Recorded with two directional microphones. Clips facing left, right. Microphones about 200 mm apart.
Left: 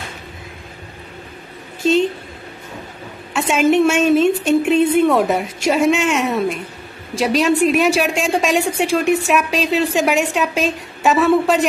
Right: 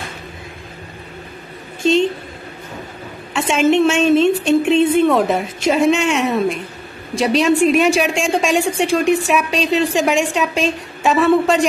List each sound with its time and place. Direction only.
3.3 s a woman's voice: 5° left (ahead or behind)